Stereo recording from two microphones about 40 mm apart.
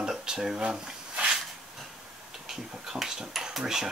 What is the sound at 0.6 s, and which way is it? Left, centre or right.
Speech, centre.